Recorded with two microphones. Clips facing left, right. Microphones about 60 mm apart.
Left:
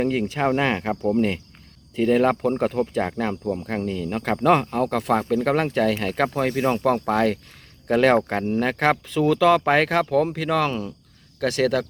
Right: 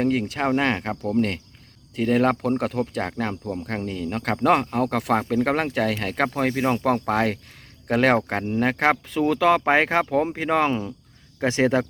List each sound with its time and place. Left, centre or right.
0.0 s speech: centre
6.8 s speech: centre; by 11.9 s right